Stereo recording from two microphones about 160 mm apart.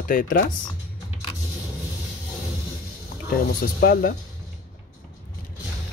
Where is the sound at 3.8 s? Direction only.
70° left (ahead or behind).